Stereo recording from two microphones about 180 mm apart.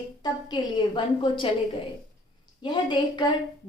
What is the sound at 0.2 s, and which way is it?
A woman's voice, 25° left (ahead or behind).